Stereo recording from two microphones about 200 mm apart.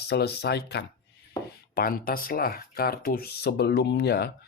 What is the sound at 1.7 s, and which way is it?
Speech, 45° left (ahead or behind).